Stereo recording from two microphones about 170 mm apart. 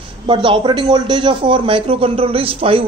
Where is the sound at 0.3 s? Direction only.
30° right (ahead or behind).